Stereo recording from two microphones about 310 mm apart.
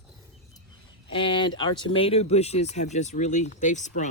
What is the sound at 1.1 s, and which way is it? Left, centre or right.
Speech, centre.